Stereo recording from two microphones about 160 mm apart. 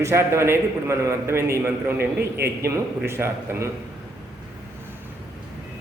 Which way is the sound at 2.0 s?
80° right.